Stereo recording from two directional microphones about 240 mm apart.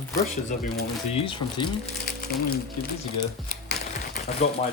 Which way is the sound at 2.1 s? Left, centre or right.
Left.